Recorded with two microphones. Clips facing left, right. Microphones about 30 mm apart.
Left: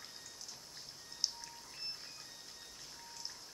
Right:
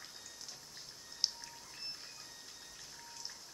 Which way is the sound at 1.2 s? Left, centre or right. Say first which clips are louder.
Right 2 dB; right.